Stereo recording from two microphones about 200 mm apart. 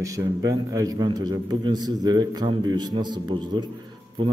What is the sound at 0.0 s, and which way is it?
A man's voice, 15° right (ahead or behind).